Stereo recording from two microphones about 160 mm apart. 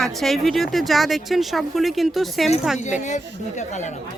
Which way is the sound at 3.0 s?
45° left (ahead or behind).